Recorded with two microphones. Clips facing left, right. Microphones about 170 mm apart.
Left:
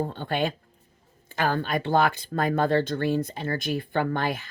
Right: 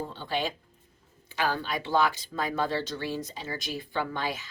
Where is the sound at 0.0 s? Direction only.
55° left (ahead or behind).